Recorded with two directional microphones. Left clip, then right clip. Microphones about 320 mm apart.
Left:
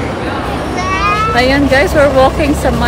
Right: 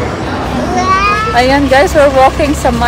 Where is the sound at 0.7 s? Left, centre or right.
Right.